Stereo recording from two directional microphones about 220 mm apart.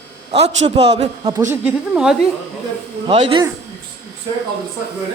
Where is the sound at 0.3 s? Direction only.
30° right (ahead or behind).